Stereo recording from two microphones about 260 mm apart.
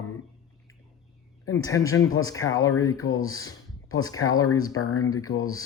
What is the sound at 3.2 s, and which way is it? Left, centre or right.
Speech, left.